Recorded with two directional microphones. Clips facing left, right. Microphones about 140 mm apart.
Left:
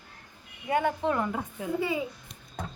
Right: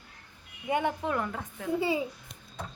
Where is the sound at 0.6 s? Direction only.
20° right (ahead or behind).